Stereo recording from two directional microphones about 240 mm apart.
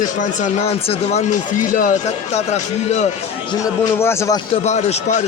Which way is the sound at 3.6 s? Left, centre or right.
Centre.